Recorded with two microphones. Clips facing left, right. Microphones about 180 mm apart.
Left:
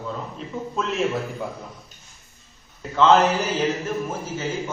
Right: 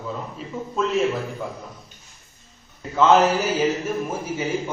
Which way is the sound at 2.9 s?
10° right (ahead or behind).